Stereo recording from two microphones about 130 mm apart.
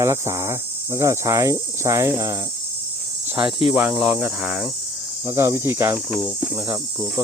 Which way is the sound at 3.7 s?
5° right (ahead or behind).